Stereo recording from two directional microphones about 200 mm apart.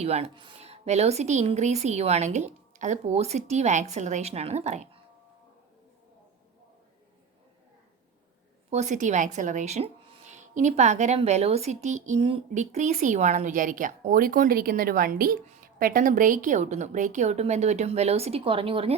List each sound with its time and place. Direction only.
0.0 s speech: 30° right (ahead or behind)
8.7 s speech: 35° right (ahead or behind)